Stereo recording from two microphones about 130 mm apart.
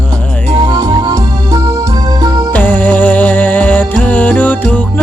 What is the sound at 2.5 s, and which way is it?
Music, 10° left (ahead or behind).